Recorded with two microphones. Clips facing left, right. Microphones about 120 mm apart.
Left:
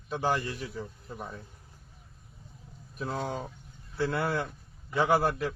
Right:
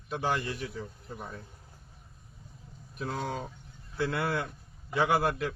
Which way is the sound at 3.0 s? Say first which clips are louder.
Left 1 dB; 35° left (ahead or behind).